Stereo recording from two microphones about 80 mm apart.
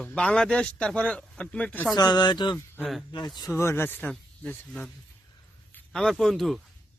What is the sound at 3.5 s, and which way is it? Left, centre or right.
Speech, left.